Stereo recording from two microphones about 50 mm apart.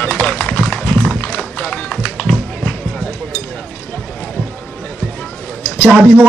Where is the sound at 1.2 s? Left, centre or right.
Left.